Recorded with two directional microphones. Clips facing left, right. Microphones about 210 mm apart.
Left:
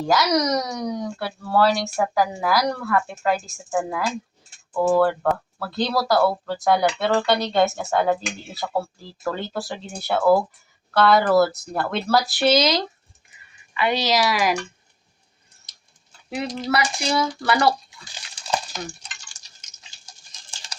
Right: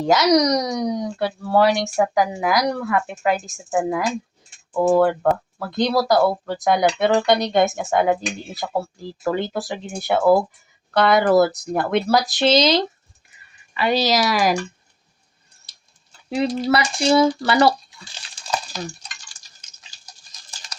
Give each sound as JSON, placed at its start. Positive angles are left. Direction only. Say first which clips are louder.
{"t": 0.0, "sound": "speech", "louder": "right 4 dB", "side_deg": -20}
{"t": 13.7, "sound": "speech", "louder": "right 2 dB", "side_deg": -35}
{"t": 16.7, "sound": "a sound", "louder": "right 5 dB", "side_deg": -30}